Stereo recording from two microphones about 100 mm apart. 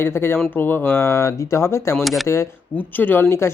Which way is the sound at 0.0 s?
25° left (ahead or behind).